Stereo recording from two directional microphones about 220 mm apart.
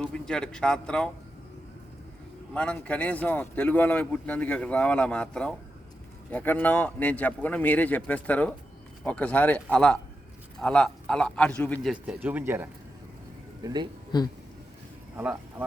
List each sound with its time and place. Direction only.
0.0 s a man's voice: 5° left (ahead or behind)
2.5 s a man's voice: 5° left (ahead or behind); by 13.8 s 15° right (ahead or behind)
15.1 s speech: 10° right (ahead or behind)